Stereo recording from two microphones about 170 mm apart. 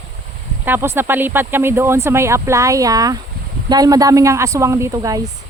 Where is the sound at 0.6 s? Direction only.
15° right (ahead or behind).